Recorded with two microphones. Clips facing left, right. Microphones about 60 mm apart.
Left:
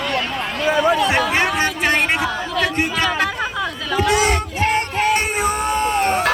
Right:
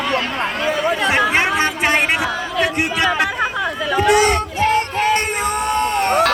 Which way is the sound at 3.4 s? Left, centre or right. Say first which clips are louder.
Right 3 dB; right.